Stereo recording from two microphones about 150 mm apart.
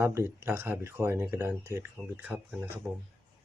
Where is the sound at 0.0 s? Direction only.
15° right (ahead or behind).